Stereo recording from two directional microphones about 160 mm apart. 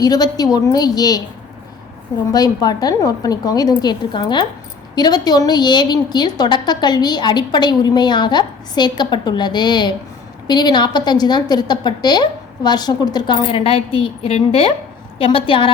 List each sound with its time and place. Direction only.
0.0 s a woman's voice: 25° left (ahead or behind)
2.3 s a woman's voice: 25° left (ahead or behind)